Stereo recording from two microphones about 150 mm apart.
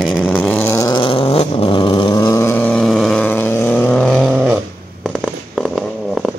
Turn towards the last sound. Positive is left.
turn(degrees=0)  # may be behind; listen again after turning